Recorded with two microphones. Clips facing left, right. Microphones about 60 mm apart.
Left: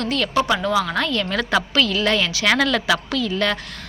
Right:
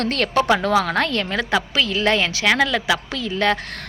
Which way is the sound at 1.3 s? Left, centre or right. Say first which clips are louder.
Even; centre.